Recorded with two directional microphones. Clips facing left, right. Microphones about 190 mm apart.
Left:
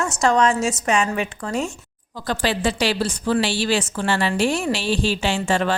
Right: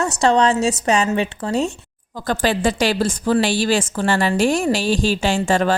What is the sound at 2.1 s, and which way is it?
Speech, 50° right (ahead or behind).